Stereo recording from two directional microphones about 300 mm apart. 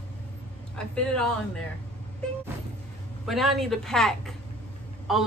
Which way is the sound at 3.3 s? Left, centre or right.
Centre.